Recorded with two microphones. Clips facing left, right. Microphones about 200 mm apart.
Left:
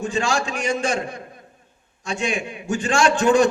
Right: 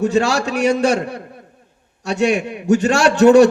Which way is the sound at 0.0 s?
65° right (ahead or behind).